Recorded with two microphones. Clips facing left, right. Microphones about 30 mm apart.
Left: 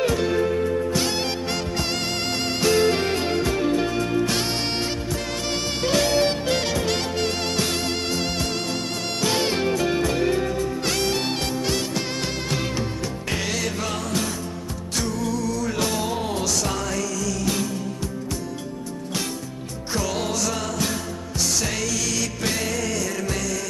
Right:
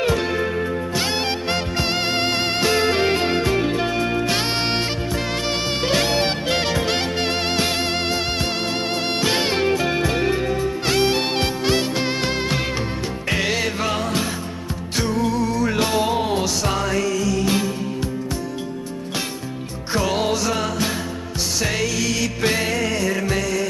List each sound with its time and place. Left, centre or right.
0.0 s music: right
5.5 s music: right
19.9 s music: right